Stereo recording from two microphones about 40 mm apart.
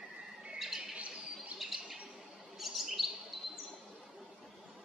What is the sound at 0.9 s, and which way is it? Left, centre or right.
Bird, right.